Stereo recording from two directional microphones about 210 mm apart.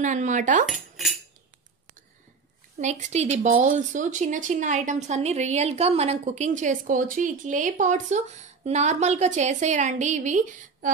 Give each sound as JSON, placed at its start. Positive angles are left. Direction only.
{"t": 0.0, "sound": "speech", "side_deg": -35}
{"t": 0.7, "sound": "cutlery", "side_deg": 0}
{"t": 2.8, "sound": "speech", "side_deg": -35}